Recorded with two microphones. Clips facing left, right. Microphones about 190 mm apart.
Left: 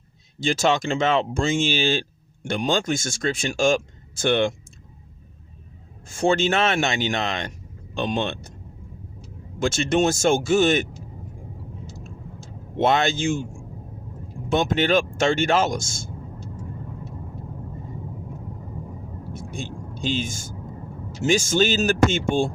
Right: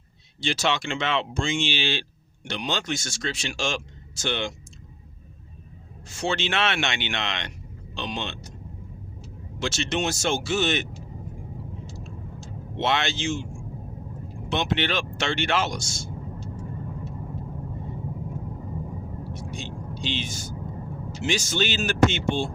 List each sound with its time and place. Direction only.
0.3 s speech: 45° left (ahead or behind)
6.1 s speech: 50° left (ahead or behind)
9.6 s speech: 50° left (ahead or behind)
12.8 s speech: 45° left (ahead or behind)
14.5 s speech: 45° left (ahead or behind)
19.4 s vehicle: 50° left (ahead or behind)
21.2 s speech: 45° left (ahead or behind)